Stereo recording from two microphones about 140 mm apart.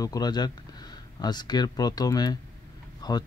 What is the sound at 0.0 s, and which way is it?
Speech, 25° left (ahead or behind).